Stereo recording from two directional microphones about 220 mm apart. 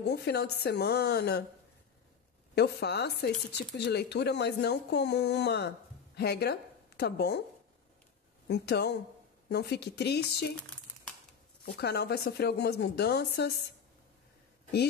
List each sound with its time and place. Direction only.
0.0 s speech: 50° left (ahead or behind)
2.5 s a woman's voice: 50° left (ahead or behind)
8.5 s speech: 50° left (ahead or behind)
11.6 s speech: 50° left (ahead or behind)